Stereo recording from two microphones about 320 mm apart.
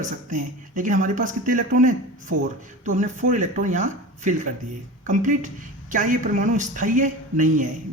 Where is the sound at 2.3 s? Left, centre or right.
Right.